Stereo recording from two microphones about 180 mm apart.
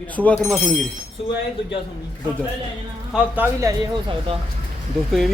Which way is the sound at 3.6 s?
20° right (ahead or behind).